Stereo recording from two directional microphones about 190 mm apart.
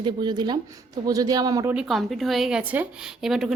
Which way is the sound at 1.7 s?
5° right (ahead or behind).